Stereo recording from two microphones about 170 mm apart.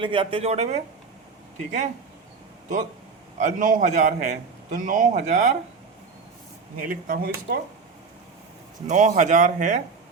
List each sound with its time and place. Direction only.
0.0 s speech: 30° right (ahead or behind)
3.3 s a man's voice: 50° right (ahead or behind)
6.8 s speech: 60° right (ahead or behind)
8.9 s a man's voice: 50° right (ahead or behind)